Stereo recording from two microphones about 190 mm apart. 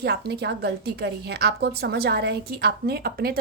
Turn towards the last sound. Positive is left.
turn(degrees=-55)  # may be behind; listen again after turning